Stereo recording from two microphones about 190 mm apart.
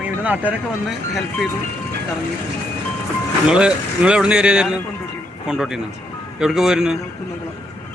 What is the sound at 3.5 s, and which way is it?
Speech, 5° right (ahead or behind).